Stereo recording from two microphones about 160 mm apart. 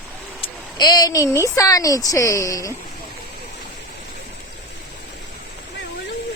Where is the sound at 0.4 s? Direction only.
25° left (ahead or behind).